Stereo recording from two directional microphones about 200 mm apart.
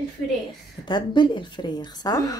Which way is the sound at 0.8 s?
25° left (ahead or behind).